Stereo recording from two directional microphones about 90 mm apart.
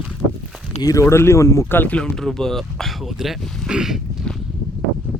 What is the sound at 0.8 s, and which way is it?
Speech, 35° left (ahead or behind).